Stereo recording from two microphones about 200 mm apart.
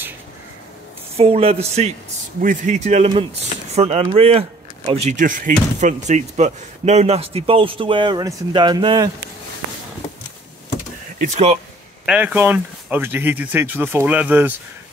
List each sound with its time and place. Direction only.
1.1 s a man's voice: 30° right (ahead or behind)
11.1 s a man's voice: 35° right (ahead or behind)
12.1 s speech: 10° right (ahead or behind)